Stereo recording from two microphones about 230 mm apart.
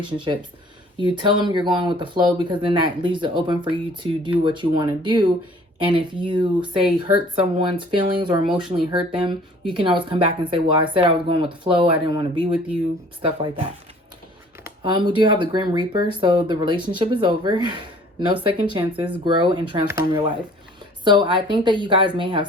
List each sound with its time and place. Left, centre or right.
1.1 s speech: centre
14.6 s speech: right